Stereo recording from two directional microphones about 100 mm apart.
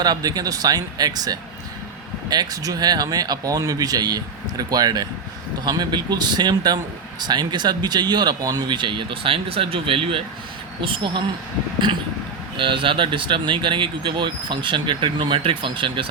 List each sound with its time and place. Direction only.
0.0 s speech: 40° right (ahead or behind); by 10.2 s 65° right (ahead or behind)
10.8 s speech: 55° right (ahead or behind)
12.5 s speech: 60° right (ahead or behind)